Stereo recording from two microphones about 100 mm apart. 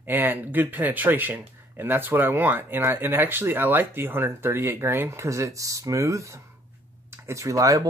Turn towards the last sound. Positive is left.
turn(degrees=-35)  # may be behind; listen again after turning